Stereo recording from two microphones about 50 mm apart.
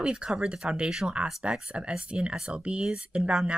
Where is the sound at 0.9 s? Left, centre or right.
Centre.